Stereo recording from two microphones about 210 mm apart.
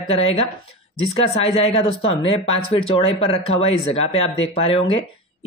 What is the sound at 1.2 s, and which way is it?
Speech, 30° left (ahead or behind).